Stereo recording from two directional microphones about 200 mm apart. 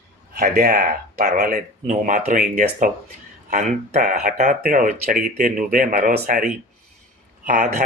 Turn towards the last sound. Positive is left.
turn(degrees=-40)  # may be behind; listen again after turning